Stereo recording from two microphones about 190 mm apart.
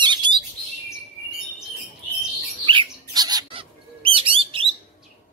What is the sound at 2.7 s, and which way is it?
Bird, 25° right (ahead or behind).